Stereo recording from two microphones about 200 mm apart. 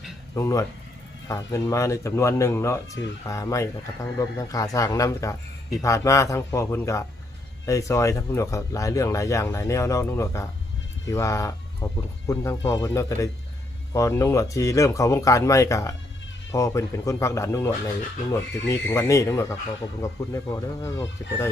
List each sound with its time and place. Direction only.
0.3 s speech: 15° left (ahead or behind)